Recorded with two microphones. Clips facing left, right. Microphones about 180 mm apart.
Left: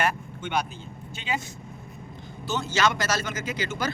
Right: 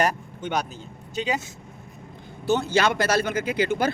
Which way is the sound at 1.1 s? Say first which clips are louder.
Right 5 dB; 40° right (ahead or behind).